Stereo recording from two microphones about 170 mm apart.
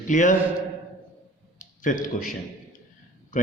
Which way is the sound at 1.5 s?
50° left (ahead or behind).